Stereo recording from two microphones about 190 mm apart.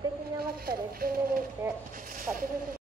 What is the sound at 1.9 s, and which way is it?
Speech, 45° right (ahead or behind).